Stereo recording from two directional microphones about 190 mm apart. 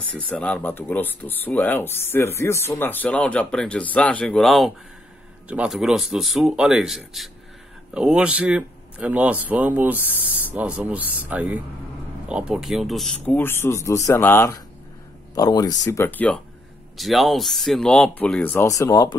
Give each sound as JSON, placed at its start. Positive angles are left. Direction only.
{"t": 0.3, "sound": "speech", "side_deg": 5}